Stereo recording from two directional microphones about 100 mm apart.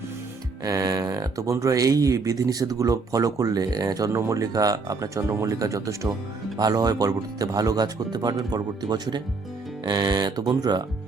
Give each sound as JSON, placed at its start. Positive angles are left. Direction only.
{"t": 0.6, "sound": "speech", "side_deg": -35}